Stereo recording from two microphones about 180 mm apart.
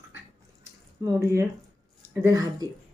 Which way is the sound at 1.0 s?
15° right (ahead or behind).